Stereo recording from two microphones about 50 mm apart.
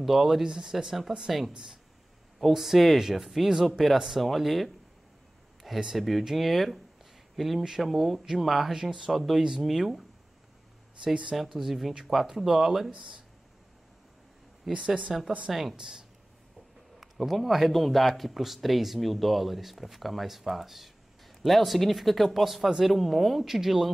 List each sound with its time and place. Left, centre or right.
0.0 s speech: centre
2.4 s speech: centre
11.3 s speech: centre
12.9 s speech: centre
14.7 s speech: centre
17.0 s speech: centre